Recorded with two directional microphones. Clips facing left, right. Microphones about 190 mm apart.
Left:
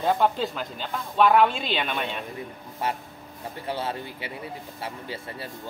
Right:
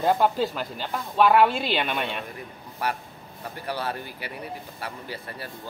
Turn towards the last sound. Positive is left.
turn(degrees=25)  # may be behind; listen again after turning